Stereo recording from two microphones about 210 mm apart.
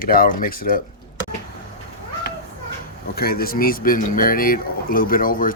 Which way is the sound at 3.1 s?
45° left (ahead or behind).